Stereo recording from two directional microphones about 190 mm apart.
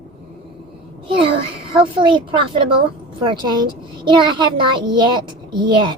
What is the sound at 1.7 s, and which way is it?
Speech, 25° right (ahead or behind).